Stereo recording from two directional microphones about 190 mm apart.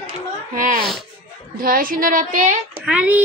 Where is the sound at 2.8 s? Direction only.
10° right (ahead or behind).